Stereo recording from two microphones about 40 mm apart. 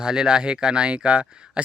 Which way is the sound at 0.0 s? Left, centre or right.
Centre.